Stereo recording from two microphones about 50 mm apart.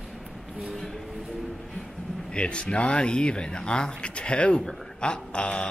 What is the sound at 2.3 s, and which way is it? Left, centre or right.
A man's voice, centre.